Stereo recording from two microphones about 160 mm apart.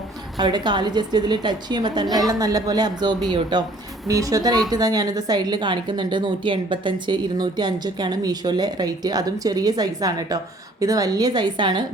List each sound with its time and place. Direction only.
0.3 s a woman's voice: 25° right (ahead or behind)